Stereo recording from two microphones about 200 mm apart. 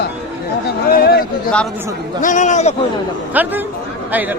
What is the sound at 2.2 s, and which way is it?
Speech, 40° left (ahead or behind).